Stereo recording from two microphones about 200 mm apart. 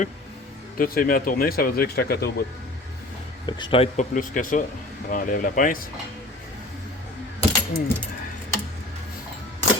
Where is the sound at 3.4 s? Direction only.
25° left (ahead or behind); by 5.9 s 45° left (ahead or behind).